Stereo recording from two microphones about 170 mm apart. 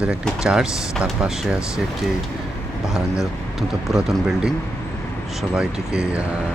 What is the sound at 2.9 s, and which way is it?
Speech, centre (ahead or behind).